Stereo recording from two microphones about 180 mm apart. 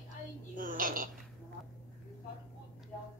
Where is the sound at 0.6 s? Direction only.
50° right (ahead or behind).